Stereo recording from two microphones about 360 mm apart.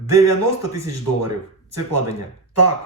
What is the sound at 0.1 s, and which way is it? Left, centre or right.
Speech, right.